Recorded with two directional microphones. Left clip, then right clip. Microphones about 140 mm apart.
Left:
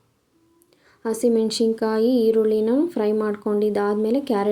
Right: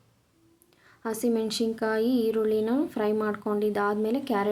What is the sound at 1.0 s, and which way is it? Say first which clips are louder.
Speech: left 7 dB; 20° left (ahead or behind).